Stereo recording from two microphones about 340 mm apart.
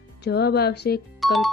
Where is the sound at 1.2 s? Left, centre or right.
Centre.